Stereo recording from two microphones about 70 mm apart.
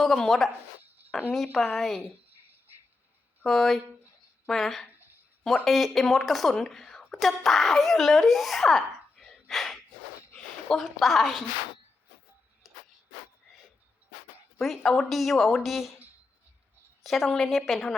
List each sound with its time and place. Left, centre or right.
0.0 s a woman's voice: centre
3.4 s a woman's voice: centre
4.9 s a sound: right
5.6 s a woman's voice: centre
10.3 s a sound: centre
10.8 s a woman's voice: centre
12.7 s a sound: centre
14.6 s a woman's voice: centre
17.0 s a woman's voice: centre